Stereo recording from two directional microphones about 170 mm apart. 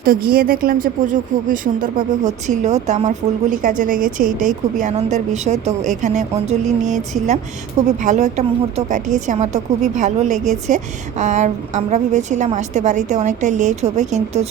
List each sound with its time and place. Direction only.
0.0 s a woman's voice: 60° right (ahead or behind); by 14.4 s 45° right (ahead or behind)